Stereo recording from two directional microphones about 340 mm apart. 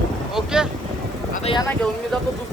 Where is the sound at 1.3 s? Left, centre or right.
Centre.